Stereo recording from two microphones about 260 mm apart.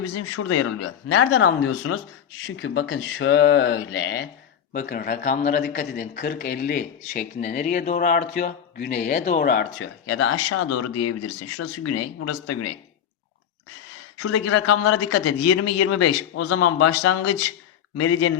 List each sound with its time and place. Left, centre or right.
0.3 s a man's voice: left
2.6 s speech: left
4.7 s speech: left
14.2 s a man's voice: left